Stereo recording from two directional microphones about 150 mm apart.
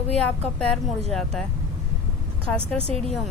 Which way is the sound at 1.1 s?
5° left (ahead or behind).